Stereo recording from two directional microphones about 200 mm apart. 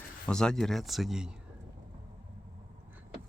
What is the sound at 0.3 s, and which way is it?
Speech, 5° left (ahead or behind).